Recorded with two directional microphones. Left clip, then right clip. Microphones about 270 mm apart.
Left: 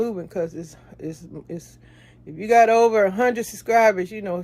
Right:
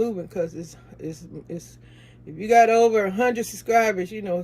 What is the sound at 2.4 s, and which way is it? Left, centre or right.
Speech, left.